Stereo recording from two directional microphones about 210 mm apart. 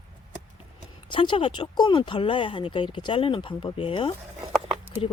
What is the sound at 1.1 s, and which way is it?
Speech, 25° left (ahead or behind).